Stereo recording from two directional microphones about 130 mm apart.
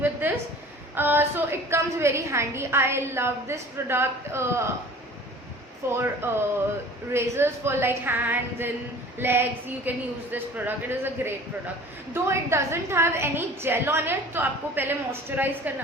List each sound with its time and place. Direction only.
0.0 s a sound: 15° right (ahead or behind)
0.9 s a woman's voice: 15° right (ahead or behind)
5.8 s a woman's voice: 20° right (ahead or behind)